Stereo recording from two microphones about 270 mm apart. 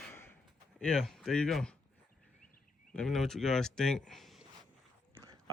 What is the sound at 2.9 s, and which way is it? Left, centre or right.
Speech, centre.